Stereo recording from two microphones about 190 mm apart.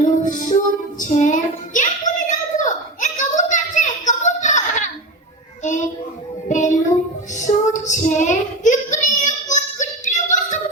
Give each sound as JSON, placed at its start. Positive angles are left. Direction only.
{"t": 0.0, "sound": "child singing", "side_deg": 40}
{"t": 6.5, "sound": "a sound", "side_deg": 40}
{"t": 7.3, "sound": "child singing", "side_deg": 40}